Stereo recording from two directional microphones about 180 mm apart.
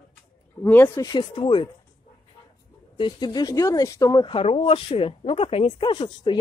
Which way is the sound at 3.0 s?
25° left (ahead or behind).